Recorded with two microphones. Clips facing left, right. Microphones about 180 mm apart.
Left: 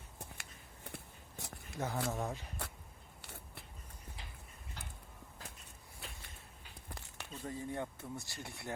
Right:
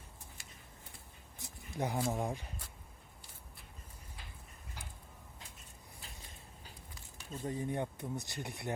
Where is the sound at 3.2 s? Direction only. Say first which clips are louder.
Left 5 dB; 70° left (ahead or behind).